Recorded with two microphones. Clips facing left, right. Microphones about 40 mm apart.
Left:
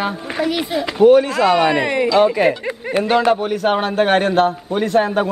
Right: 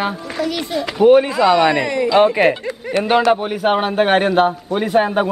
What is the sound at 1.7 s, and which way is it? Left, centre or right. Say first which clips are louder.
Speech: left 1 dB; left.